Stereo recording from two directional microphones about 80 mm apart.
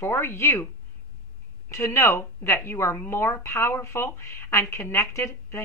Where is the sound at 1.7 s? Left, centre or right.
Left.